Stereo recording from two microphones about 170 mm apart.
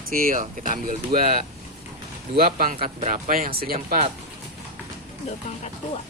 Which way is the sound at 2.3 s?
60° right (ahead or behind).